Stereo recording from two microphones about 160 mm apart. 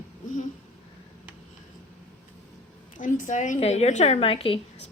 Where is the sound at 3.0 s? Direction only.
55° left (ahead or behind); by 4.8 s 35° left (ahead or behind).